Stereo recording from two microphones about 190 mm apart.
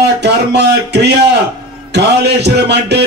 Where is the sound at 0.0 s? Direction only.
65° right (ahead or behind).